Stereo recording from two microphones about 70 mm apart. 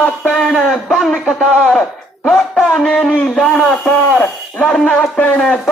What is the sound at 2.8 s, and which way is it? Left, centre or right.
A man's voice, centre.